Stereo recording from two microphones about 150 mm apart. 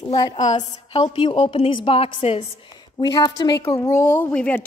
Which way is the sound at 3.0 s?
25° left (ahead or behind).